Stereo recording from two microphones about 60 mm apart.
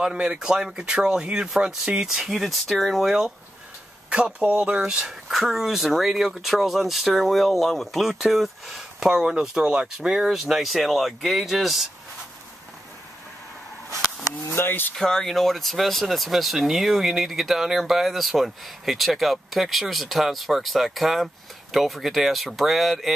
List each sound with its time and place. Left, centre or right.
0.0 s speech: centre
2.2 s speech: centre
4.1 s speech: right; by 11.9 s centre
14.5 s speech: left
15.0 s speech: centre